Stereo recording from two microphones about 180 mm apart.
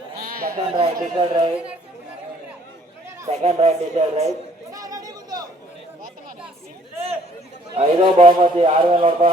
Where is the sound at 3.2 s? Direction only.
40° right (ahead or behind).